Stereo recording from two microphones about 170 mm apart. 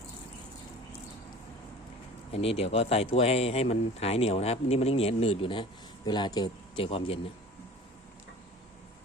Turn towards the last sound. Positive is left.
turn(degrees=30)  # may be behind; listen again after turning